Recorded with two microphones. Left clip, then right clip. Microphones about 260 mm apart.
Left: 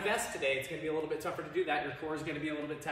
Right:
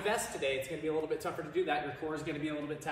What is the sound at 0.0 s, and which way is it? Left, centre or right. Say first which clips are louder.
A man's voice: left 1 dB; centre.